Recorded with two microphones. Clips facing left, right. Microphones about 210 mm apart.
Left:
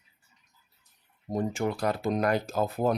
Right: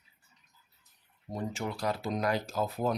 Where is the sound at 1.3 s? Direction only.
50° left (ahead or behind).